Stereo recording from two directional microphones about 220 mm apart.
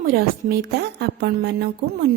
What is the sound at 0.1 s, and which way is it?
A woman's voice, 45° right (ahead or behind).